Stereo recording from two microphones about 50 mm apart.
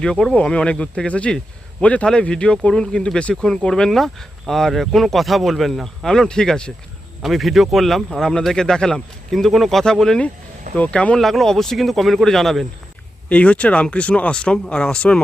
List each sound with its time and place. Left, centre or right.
0.0 s speech: centre
7.2 s speech: centre
9.3 s speech: centre
10.8 s speech: left
11.2 s speech: centre
13.2 s speech: left